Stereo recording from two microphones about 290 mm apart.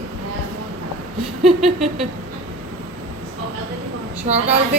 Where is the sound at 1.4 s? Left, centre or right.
Centre.